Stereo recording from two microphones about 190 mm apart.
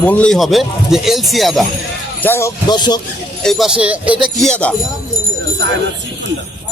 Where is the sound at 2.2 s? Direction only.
10° left (ahead or behind).